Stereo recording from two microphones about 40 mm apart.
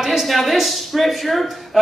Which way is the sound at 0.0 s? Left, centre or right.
Centre.